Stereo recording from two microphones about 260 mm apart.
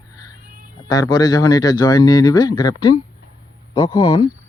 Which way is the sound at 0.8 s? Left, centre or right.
Centre.